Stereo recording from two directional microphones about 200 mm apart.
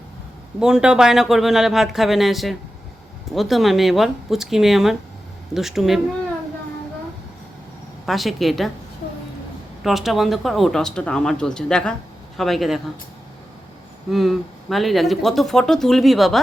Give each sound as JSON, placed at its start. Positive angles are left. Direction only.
{"t": 0.6, "sound": "speech", "side_deg": -5}
{"t": 8.0, "sound": "speech", "side_deg": 0}
{"t": 9.8, "sound": "speech", "side_deg": 0}
{"t": 14.1, "sound": "speech", "side_deg": 0}